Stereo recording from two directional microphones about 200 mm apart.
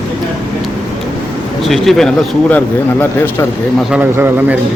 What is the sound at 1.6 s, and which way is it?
Speech, centre (ahead or behind).